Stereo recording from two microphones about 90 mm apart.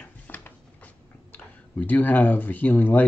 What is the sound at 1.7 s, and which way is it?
Speech, 20° left (ahead or behind).